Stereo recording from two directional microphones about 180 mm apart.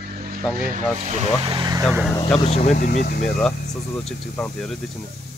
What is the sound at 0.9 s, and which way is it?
Speech, 40° right (ahead or behind).